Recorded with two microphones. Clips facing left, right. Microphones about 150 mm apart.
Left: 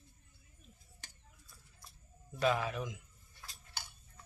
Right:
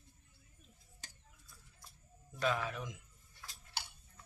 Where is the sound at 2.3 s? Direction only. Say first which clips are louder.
Left 3 dB; 5° left (ahead or behind).